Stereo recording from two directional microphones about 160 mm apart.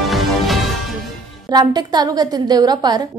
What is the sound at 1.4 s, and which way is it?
A woman's voice, 25° right (ahead or behind).